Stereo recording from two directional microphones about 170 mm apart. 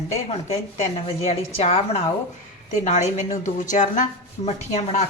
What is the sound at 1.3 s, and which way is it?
Speech, 40° left (ahead or behind).